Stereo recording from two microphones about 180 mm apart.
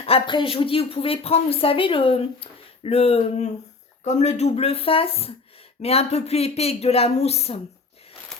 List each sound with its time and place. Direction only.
0.0 s speech: 30° left (ahead or behind)